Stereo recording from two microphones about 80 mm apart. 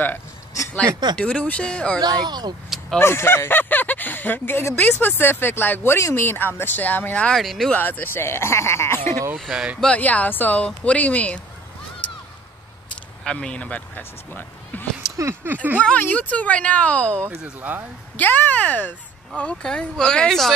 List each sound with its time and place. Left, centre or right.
1.1 s speech: centre
2.0 s speech: right
3.0 s speech: left
7.2 s speech: centre
7.7 s speech: left
9.5 s speech: centre
9.8 s speech: centre
13.2 s speech: centre
15.4 s speech: right
16.0 s speech: centre
17.6 s speech: right
18.1 s speech: left; by 20.5 s centre